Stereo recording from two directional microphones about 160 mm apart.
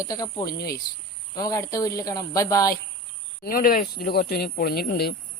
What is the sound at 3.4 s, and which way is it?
Speech, 65° left (ahead or behind).